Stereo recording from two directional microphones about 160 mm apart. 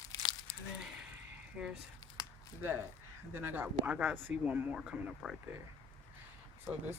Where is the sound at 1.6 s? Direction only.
5° right (ahead or behind).